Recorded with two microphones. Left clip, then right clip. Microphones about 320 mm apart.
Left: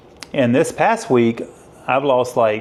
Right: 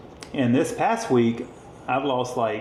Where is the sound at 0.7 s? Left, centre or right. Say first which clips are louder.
Left 6 dB; centre.